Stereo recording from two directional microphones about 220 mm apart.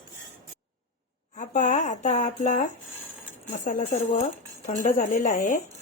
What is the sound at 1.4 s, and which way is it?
Speech, 35° left (ahead or behind).